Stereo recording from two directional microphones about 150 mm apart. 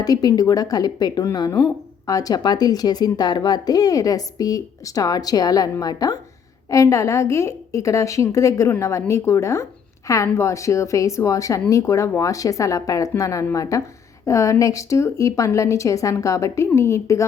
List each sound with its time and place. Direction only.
0.0 s speech: 25° left (ahead or behind)